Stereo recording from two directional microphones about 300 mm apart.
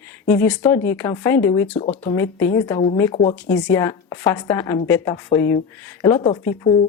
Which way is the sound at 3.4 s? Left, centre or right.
Centre.